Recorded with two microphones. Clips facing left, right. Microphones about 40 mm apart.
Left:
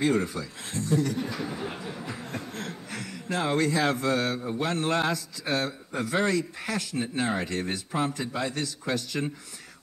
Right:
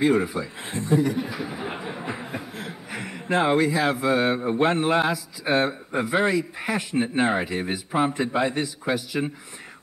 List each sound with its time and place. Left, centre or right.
0.0 s a man's voice: centre
3.0 s music: right
3.5 s speech: centre; by 4.8 s right
4.8 s a man's voice: centre
5.5 s speech: right
7.4 s speech: centre